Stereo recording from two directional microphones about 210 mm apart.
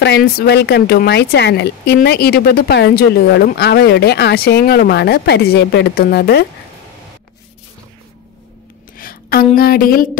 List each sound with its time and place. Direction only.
0.0 s speech: 50° left (ahead or behind)
8.9 s a sound: 45° left (ahead or behind)
9.6 s speech: 45° left (ahead or behind)